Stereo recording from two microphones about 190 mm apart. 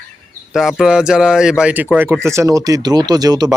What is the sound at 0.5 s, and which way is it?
Speech, centre (ahead or behind).